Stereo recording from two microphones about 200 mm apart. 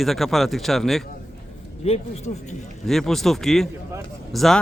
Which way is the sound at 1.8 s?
30° left (ahead or behind).